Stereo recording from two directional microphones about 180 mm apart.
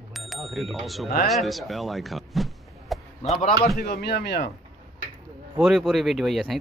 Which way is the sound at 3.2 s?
40° left (ahead or behind).